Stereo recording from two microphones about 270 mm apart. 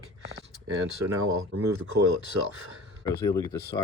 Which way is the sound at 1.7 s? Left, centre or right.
Right.